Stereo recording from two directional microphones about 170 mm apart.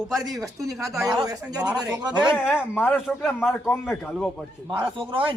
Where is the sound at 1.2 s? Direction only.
25° right (ahead or behind).